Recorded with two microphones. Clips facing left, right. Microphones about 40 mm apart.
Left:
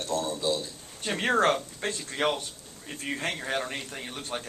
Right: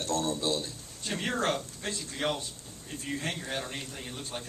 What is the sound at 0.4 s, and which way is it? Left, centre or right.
Speech, right.